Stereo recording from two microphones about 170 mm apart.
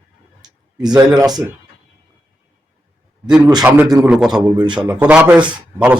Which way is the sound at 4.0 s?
5° right (ahead or behind).